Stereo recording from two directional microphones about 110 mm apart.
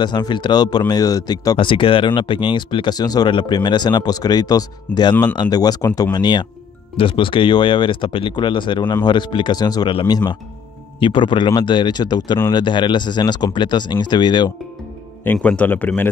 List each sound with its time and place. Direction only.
0.0 s speech: 40° left (ahead or behind)
1.6 s speech: 50° left (ahead or behind); by 6.1 s 25° left (ahead or behind)
6.1 s speech: 40° left (ahead or behind)
7.0 s speech: 50° left (ahead or behind)
15.4 s a man's voice: 15° left (ahead or behind)